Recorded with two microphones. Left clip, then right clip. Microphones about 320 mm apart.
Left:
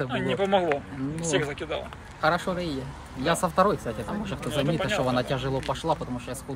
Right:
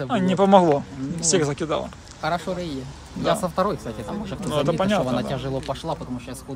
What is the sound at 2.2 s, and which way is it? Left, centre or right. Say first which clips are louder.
Speech: left 1 dB; centre.